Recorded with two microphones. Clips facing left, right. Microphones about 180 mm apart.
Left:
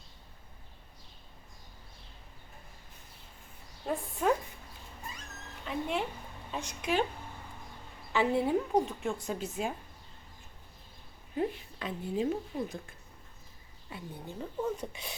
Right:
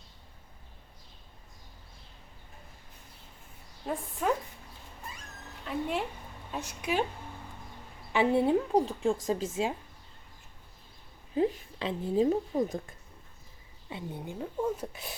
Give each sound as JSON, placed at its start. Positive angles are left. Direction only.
{"t": 3.9, "sound": "speech", "side_deg": 0}
{"t": 5.6, "sound": "speech", "side_deg": 0}
{"t": 8.1, "sound": "a woman's voice", "side_deg": -20}
{"t": 8.7, "sound": "a woman's voice", "side_deg": -35}
{"t": 11.8, "sound": "a woman's voice", "side_deg": -30}
{"t": 13.9, "sound": "a woman's voice", "side_deg": -25}
{"t": 14.3, "sound": "speech", "side_deg": -5}